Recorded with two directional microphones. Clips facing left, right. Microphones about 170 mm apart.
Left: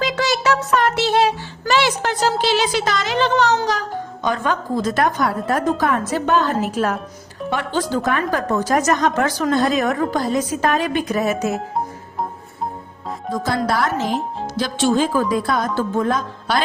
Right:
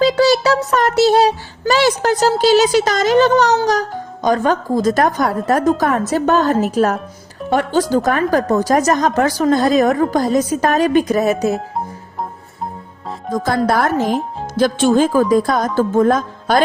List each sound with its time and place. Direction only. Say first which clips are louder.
0.0 s a sound: right 7 dB; 35° right (ahead or behind)
1.7 s speech: right 4 dB; 40° right (ahead or behind)
13.3 s speech: right 4 dB; 50° right (ahead or behind)